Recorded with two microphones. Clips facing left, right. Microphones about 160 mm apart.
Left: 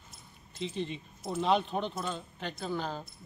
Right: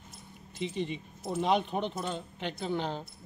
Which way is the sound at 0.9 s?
10° right (ahead or behind).